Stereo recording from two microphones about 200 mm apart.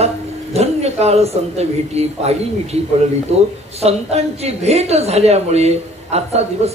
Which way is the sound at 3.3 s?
30° right (ahead or behind).